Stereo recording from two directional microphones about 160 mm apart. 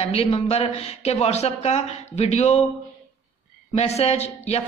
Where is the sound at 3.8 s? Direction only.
40° left (ahead or behind).